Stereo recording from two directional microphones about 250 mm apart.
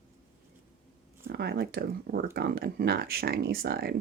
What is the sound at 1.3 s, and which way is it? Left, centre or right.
Speech, right.